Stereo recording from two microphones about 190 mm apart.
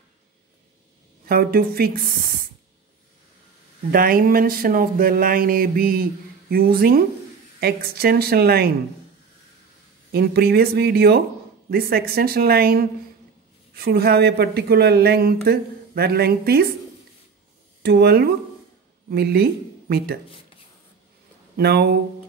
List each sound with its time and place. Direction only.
1.3 s speech: 50° right (ahead or behind)
3.9 s speech: 50° right (ahead or behind)
10.1 s a woman's voice: 55° right (ahead or behind)
17.8 s speech: 55° right (ahead or behind)
21.5 s speech: 60° right (ahead or behind)